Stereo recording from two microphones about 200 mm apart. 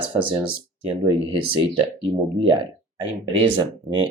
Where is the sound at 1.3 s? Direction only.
25° right (ahead or behind).